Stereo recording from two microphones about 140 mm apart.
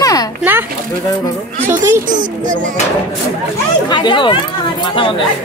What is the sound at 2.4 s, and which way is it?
Music, 70° right (ahead or behind).